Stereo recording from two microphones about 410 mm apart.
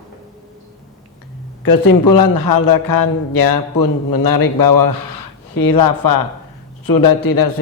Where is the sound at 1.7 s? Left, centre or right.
Left.